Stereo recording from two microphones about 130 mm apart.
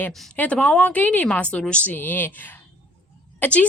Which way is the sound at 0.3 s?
10° left (ahead or behind).